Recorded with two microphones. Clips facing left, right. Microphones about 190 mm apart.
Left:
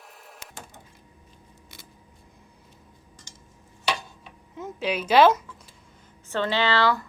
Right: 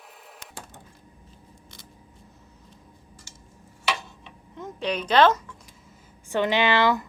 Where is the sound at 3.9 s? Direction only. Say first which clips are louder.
Even; 5° left (ahead or behind).